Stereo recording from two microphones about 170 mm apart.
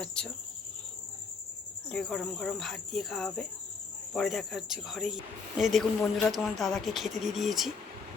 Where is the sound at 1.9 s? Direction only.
5° left (ahead or behind).